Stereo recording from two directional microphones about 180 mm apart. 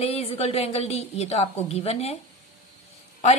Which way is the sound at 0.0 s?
35° left (ahead or behind).